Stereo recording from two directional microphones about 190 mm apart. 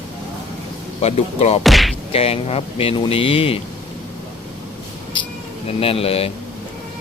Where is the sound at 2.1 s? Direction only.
30° left (ahead or behind).